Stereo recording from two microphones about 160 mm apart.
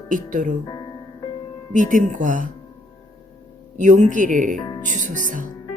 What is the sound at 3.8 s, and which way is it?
Speech, 50° right (ahead or behind).